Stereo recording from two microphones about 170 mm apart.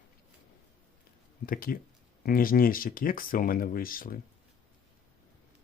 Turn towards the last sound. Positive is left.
turn(degrees=55)  # may be behind; listen again after turning